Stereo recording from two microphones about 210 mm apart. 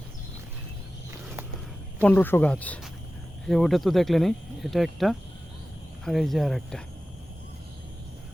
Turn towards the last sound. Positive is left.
turn(degrees=0)  # may be behind; listen again after turning